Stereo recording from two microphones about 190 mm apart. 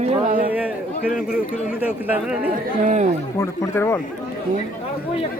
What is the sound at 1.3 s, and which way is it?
Speech, 5° right (ahead or behind).